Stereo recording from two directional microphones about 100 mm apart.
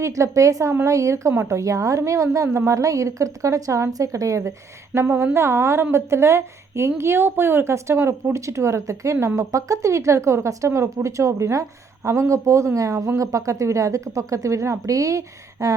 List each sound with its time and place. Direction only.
0.0 s a woman's voice: 30° right (ahead or behind)